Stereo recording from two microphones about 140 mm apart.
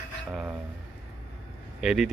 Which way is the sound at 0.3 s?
10° right (ahead or behind).